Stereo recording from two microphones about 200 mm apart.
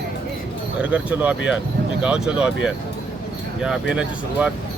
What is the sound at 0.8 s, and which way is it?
Speech, 5° right (ahead or behind).